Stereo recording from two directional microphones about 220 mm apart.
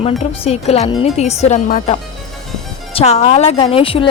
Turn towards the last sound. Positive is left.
turn(degrees=25)  # may be behind; listen again after turning